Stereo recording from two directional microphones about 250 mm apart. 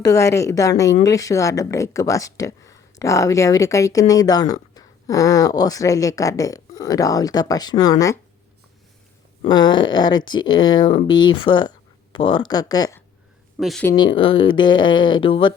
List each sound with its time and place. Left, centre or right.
0.0 s speech: centre
9.5 s speech: centre
13.6 s speech: centre
14.2 s speech: left